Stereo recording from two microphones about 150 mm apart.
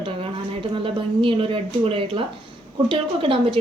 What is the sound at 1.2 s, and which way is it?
Speech, 35° right (ahead or behind).